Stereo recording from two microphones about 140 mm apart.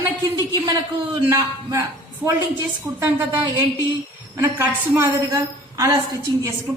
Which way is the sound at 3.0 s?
20° right (ahead or behind).